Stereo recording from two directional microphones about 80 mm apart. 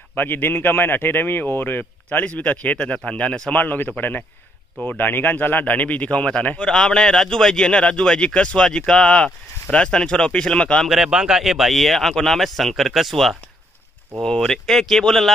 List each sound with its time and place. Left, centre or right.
0.1 s speech: left
10.9 s speech: centre